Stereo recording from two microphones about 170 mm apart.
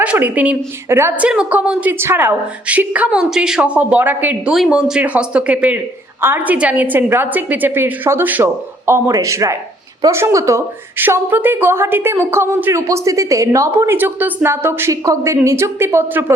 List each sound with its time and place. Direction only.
0.0 s a woman's voice: 10° right (ahead or behind)